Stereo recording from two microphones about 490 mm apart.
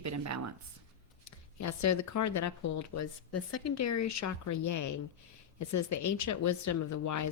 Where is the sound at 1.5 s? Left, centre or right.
Left.